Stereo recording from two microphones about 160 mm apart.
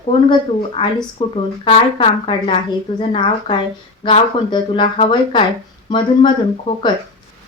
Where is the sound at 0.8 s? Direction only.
30° left (ahead or behind).